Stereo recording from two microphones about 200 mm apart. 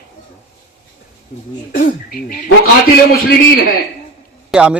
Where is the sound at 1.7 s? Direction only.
45° left (ahead or behind).